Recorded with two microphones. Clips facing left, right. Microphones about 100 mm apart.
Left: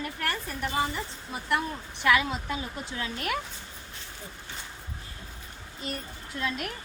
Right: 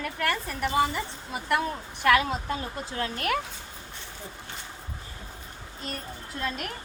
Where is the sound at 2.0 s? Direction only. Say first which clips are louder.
Right 2 dB; 45° right (ahead or behind).